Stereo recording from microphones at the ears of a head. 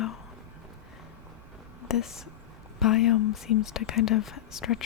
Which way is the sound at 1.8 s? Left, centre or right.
Left.